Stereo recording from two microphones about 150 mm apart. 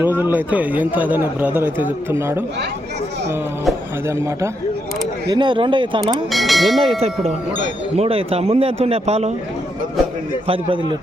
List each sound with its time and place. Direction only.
0.0 s speech: 15° right (ahead or behind)
5.3 s speech: 30° right (ahead or behind)
6.3 s speech: centre (ahead or behind)
7.9 s speech: 40° right (ahead or behind)
10.4 s speech: 35° right (ahead or behind)